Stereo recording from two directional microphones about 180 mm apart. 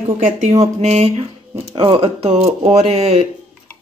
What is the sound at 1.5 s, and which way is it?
Speech, 25° right (ahead or behind).